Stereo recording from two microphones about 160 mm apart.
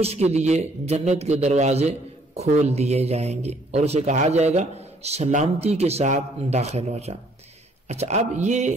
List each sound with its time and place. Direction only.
0.0 s a man's voice: 40° right (ahead or behind)